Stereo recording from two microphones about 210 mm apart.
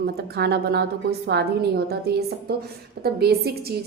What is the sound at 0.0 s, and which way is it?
A woman's voice, 50° right (ahead or behind).